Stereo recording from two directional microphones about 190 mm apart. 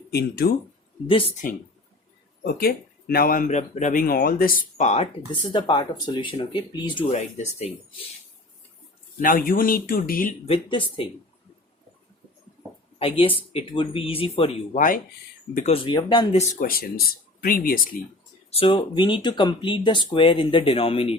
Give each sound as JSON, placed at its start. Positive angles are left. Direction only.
{"t": 0.1, "sound": "speech", "side_deg": 55}
{"t": 1.0, "sound": "speech", "side_deg": 30}
{"t": 2.4, "sound": "speech", "side_deg": 50}
{"t": 5.3, "sound": "speech", "side_deg": 25}
{"t": 9.2, "sound": "speech", "side_deg": 50}
{"t": 10.4, "sound": "speech", "side_deg": 30}
{"t": 13.0, "sound": "speech", "side_deg": 30}
{"t": 14.8, "sound": "speech", "side_deg": 45}
{"t": 15.5, "sound": "speech", "side_deg": 35}
{"t": 16.4, "sound": "speech", "side_deg": 45}
{"t": 18.5, "sound": "speech", "side_deg": 30}